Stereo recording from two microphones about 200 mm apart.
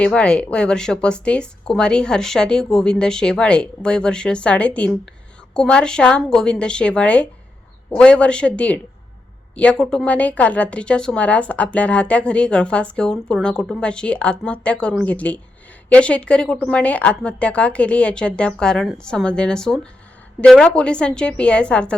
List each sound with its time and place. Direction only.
0.0 s a woman's voice: 5° left (ahead or behind)